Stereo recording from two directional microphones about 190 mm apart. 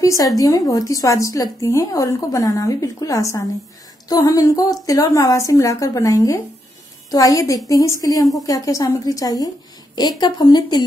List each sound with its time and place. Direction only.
0.0 s a woman's voice: 15° left (ahead or behind)